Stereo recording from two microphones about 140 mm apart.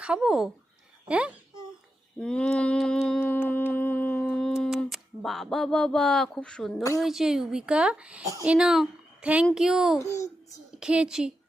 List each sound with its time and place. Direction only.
0.0 s a woman's voice: 5° right (ahead or behind)
2.1 s speech: 5° left (ahead or behind)
3.7 s humming: 10° left (ahead or behind)
7.0 s a woman's voice: centre (ahead or behind)
10.1 s a child's voice: 20° left (ahead or behind)
10.8 s a woman's voice: 5° right (ahead or behind)